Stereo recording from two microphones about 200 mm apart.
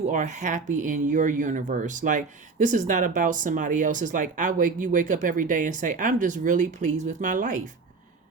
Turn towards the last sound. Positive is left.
turn(degrees=-40)  # may be behind; listen again after turning